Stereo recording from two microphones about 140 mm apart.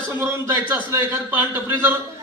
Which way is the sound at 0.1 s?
15° right (ahead or behind).